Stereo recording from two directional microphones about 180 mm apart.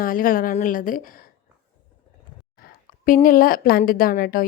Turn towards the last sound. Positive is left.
turn(degrees=50)  # may be behind; listen again after turning